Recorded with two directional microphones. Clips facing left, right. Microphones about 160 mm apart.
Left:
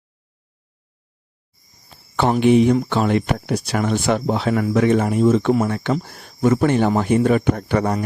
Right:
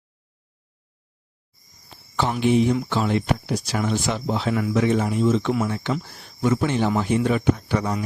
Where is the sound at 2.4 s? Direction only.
65° left (ahead or behind).